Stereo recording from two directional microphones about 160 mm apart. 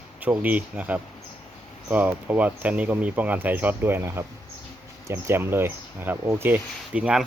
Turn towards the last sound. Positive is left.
turn(degrees=-5)  # may be behind; listen again after turning